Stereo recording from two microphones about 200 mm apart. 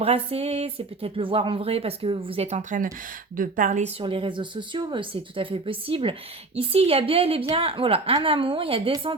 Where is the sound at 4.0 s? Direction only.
25° right (ahead or behind).